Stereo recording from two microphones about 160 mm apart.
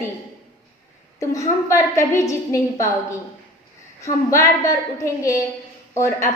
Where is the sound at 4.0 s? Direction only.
20° left (ahead or behind).